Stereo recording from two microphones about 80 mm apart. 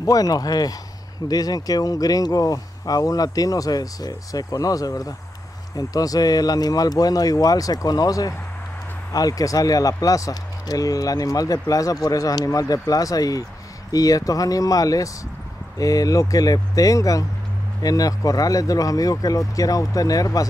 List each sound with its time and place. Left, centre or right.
0.0 s speech: left